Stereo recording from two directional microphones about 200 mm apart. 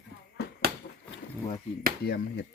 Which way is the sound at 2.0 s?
55° left (ahead or behind).